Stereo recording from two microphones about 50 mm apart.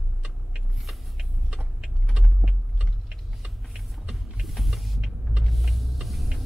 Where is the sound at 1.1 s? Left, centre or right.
Centre.